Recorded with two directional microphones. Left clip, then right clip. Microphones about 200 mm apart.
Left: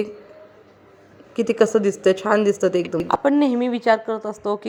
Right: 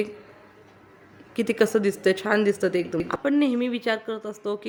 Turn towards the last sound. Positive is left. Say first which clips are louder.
# left 6 dB
turn(degrees=5)  # may be behind; listen again after turning